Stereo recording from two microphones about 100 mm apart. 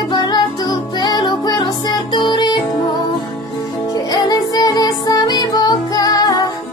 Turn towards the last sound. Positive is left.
turn(degrees=40)  # may be behind; listen again after turning